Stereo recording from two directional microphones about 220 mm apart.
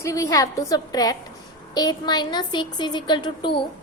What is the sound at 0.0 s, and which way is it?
A woman's voice, 15° left (ahead or behind).